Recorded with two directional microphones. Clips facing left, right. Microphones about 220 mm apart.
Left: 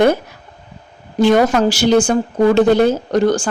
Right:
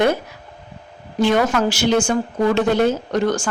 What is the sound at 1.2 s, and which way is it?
A woman's voice, 40° left (ahead or behind).